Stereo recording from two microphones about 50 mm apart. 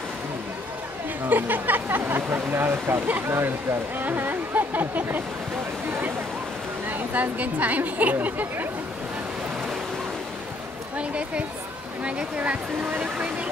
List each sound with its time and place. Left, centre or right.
1.3 s speech: right
6.9 s speech: right
11.0 s speech: right